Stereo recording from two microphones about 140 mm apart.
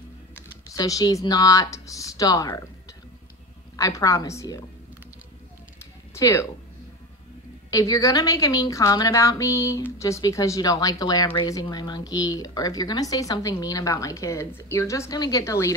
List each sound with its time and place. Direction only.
0.7 s speech: 25° left (ahead or behind)
3.7 s speech: 25° left (ahead or behind)
6.1 s speech: 20° left (ahead or behind)
7.7 s speech: 25° left (ahead or behind)